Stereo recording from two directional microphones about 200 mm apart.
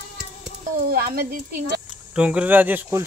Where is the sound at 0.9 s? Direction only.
50° right (ahead or behind).